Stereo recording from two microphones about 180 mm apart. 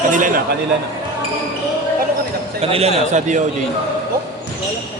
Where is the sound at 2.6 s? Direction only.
35° right (ahead or behind).